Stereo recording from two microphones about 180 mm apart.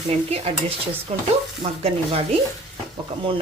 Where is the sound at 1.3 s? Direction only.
35° right (ahead or behind).